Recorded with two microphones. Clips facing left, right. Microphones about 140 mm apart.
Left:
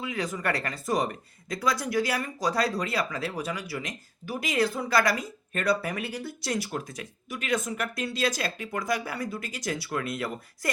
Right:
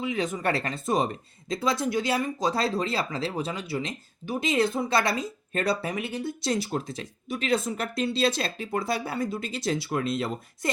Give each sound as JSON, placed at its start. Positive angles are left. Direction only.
{"t": 0.0, "sound": "speech", "side_deg": -20}